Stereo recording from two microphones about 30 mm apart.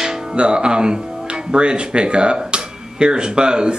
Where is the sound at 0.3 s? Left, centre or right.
Right.